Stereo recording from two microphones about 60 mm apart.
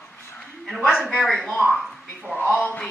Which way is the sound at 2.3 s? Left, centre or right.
Left.